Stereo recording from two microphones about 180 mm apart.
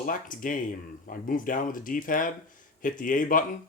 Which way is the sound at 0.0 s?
50° left (ahead or behind).